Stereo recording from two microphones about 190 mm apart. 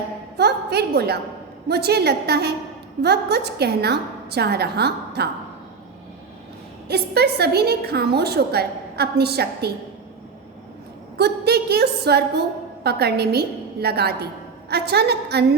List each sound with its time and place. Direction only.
0.3 s a woman's voice: 60° right (ahead or behind)
6.8 s a woman's voice: 60° right (ahead or behind)
11.2 s a woman's voice: 60° right (ahead or behind)